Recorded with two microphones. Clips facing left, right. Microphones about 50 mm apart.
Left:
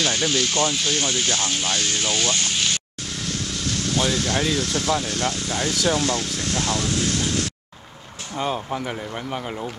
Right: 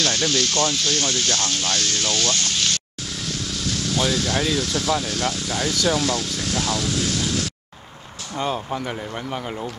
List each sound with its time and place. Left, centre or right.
0.0 s speech: centre
4.4 s speech: centre
5.7 s speech: centre
6.4 s speech: centre
6.7 s speech: left
8.4 s speech: centre